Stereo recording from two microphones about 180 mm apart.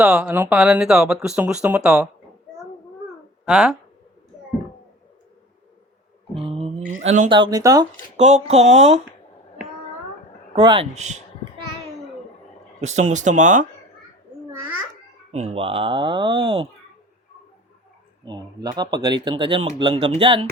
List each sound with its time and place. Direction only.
0.0 s speech: 10° right (ahead or behind)
3.4 s speech: 5° right (ahead or behind)
6.5 s speech: 35° right (ahead or behind)
7.3 s speech: 25° right (ahead or behind)
8.1 s speech: 40° right (ahead or behind)
10.5 s speech: 30° right (ahead or behind)
10.9 s speech: 40° right (ahead or behind)
12.8 s speech: 40° right (ahead or behind)
15.3 s speech: 35° right (ahead or behind)
18.3 s speech: 20° right (ahead or behind)